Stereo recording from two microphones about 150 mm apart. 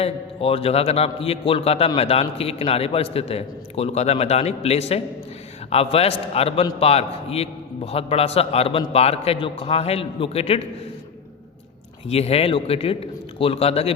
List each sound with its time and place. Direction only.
0.0 s a man's voice: 40° left (ahead or behind)
12.0 s a man's voice: 45° left (ahead or behind)